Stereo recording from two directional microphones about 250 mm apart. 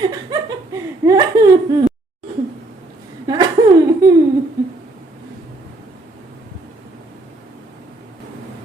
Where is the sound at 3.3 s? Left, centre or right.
Centre.